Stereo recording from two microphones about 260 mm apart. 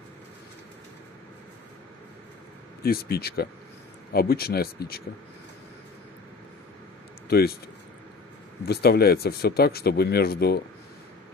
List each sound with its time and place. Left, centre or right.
2.8 s speech: left
7.2 s speech: left
8.6 s speech: left